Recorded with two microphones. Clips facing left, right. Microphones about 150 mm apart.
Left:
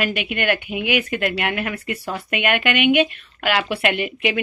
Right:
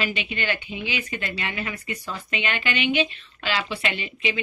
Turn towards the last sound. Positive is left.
turn(degrees=60)  # may be behind; listen again after turning